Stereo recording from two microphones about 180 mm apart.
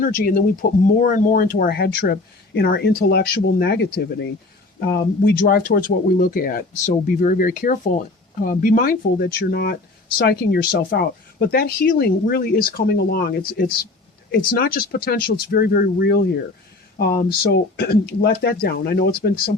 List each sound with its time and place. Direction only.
0.0 s speech: 55° left (ahead or behind)